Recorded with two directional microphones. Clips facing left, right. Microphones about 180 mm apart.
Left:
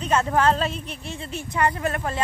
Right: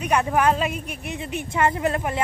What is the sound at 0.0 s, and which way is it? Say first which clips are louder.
A woman's voice: even; 15° right (ahead or behind).